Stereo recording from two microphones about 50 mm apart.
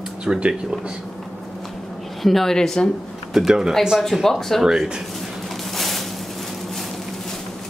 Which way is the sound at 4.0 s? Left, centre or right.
Centre.